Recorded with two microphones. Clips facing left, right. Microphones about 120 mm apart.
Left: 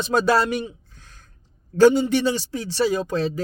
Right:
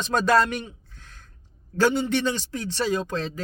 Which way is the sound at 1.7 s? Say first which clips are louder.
Left 6 dB; 15° left (ahead or behind).